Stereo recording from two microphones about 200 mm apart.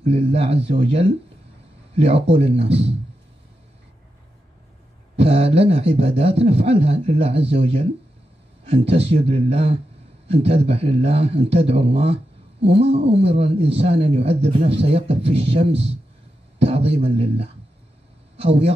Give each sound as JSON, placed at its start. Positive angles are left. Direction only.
{"t": 0.0, "sound": "speech", "side_deg": -30}
{"t": 5.1, "sound": "speech", "side_deg": -30}